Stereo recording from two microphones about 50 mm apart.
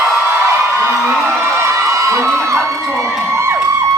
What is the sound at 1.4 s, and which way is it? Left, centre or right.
Crowd, right.